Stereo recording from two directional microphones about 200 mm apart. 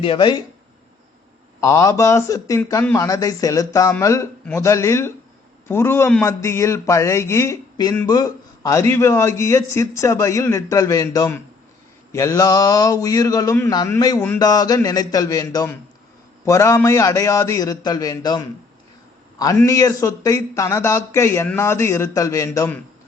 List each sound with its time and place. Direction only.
0.0 s speech: 25° left (ahead or behind)
1.6 s speech: 15° left (ahead or behind)
19.6 s speech: 15° left (ahead or behind)